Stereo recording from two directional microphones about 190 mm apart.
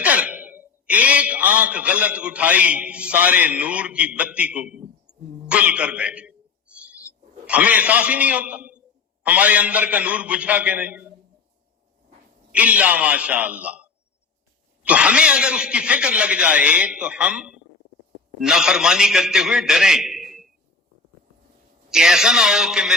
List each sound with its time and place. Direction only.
0.0 s a man's voice: 5° right (ahead or behind)
7.4 s a man's voice: 5° right (ahead or behind)
12.5 s a man's voice: 5° right (ahead or behind)
21.8 s speech: 5° right (ahead or behind)